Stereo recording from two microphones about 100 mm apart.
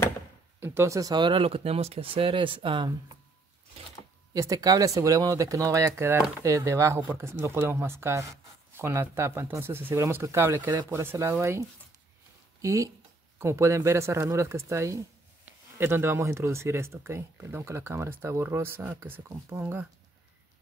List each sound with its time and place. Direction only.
0.6 s speech: 25° right (ahead or behind)
1.1 s speech: 55° right (ahead or behind)
4.3 s speech: 35° right (ahead or behind)
12.6 s speech: 30° right (ahead or behind)